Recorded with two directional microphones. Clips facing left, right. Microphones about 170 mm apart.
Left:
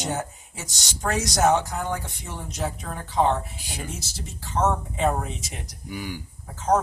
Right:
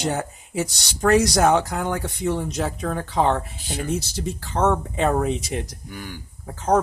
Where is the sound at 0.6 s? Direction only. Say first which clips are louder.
Right 10 dB; 70° right (ahead or behind).